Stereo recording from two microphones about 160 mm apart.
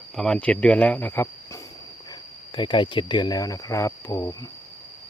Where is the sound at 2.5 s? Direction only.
30° left (ahead or behind).